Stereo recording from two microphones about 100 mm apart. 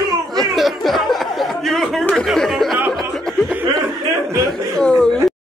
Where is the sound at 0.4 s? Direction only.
Centre (ahead or behind).